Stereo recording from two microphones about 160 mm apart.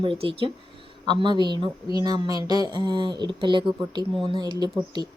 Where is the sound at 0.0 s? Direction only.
35° right (ahead or behind).